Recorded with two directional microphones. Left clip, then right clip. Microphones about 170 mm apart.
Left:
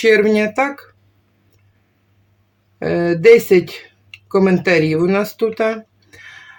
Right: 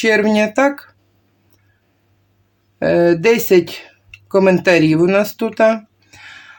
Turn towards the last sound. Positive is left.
turn(degrees=-30)  # may be behind; listen again after turning